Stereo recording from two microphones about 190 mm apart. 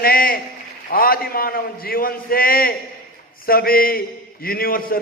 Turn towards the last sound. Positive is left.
turn(degrees=50)  # may be behind; listen again after turning